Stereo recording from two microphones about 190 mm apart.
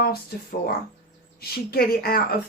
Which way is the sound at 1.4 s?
55° left (ahead or behind).